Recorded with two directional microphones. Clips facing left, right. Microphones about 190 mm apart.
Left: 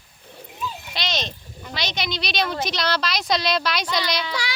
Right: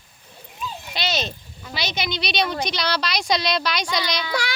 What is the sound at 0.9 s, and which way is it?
Speech, 5° right (ahead or behind).